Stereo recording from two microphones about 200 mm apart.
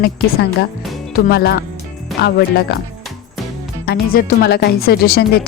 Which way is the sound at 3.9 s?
45° left (ahead or behind).